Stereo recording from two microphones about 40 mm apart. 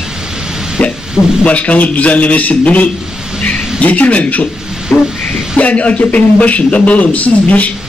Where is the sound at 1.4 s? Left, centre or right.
Left.